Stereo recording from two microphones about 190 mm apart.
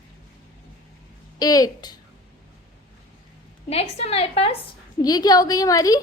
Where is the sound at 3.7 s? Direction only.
35° left (ahead or behind).